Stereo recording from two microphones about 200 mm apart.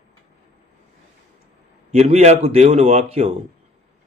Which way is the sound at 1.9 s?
30° right (ahead or behind).